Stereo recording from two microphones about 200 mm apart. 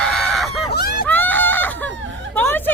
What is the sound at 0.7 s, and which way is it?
Hubbub, 55° left (ahead or behind).